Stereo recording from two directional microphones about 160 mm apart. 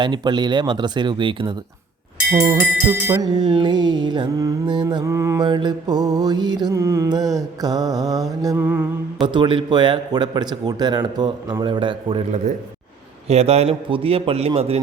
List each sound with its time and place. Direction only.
0.0 s mantra: 30° right (ahead or behind)
2.3 s mantra: 15° right (ahead or behind)
5.0 s mantra: 20° right (ahead or behind)
5.5 s mantra: 30° right (ahead or behind); by 8.9 s 15° right (ahead or behind)
9.2 s mantra: 30° right (ahead or behind)
11.6 s a man's voice: 30° right (ahead or behind)
13.2 s a man's voice: 40° right (ahead or behind)